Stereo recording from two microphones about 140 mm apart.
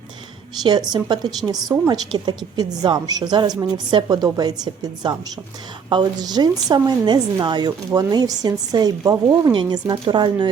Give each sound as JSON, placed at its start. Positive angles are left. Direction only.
{"t": 0.6, "sound": "a woman's voice", "side_deg": -30}